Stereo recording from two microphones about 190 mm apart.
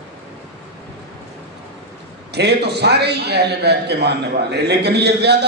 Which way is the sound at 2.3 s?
60° right (ahead or behind).